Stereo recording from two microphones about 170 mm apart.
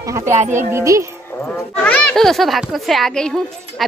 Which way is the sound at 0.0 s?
15° right (ahead or behind).